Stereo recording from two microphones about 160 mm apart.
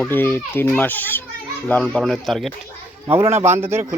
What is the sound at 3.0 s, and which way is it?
Speech, 15° right (ahead or behind).